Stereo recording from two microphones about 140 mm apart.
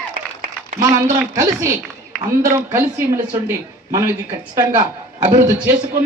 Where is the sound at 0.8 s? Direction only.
25° right (ahead or behind).